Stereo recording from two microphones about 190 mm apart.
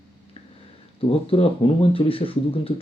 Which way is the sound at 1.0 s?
30° left (ahead or behind).